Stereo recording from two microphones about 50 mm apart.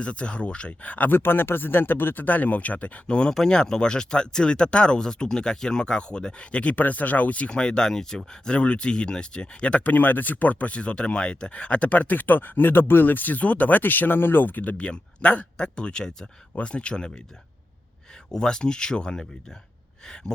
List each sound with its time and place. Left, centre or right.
0.0 s speech: left
1.1 s speech: left; by 17.1 s centre
18.3 s speech: centre